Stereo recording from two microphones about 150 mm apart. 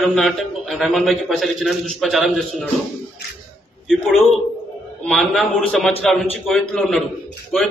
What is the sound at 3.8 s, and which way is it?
A man's voice, centre (ahead or behind).